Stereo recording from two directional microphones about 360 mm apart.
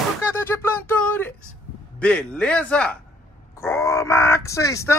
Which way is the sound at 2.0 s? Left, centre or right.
Centre.